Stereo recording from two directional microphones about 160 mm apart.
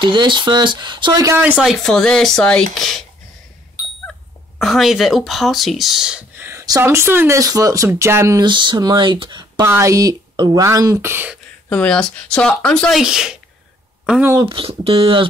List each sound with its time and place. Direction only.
0.1 s speech: 30° right (ahead or behind)
1.4 s speech: 5° right (ahead or behind)
4.1 s speech: centre (ahead or behind)
11.7 s speech: 5° left (ahead or behind)
14.4 s speech: 35° right (ahead or behind)